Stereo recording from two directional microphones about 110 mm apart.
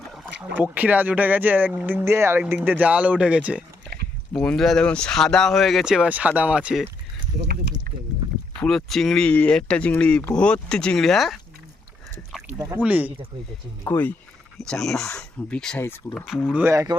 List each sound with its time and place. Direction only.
0.5 s speech: 15° right (ahead or behind)
3.9 s a sound: 5° left (ahead or behind)
4.4 s speech: 5° left (ahead or behind)
8.5 s speech: 5° left (ahead or behind)
12.7 s speech: 15° right (ahead or behind)
13.8 s speech: 20° left (ahead or behind)
14.6 s speech: 5° left (ahead or behind)
15.8 s speech: 20° left (ahead or behind)
16.1 s speech: centre (ahead or behind)
16.6 s speech: 30° right (ahead or behind)